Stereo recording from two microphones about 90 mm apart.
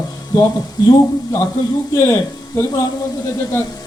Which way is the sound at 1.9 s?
35° left (ahead or behind).